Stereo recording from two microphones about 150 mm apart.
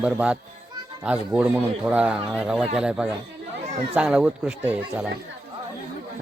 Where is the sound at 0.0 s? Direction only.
5° right (ahead or behind).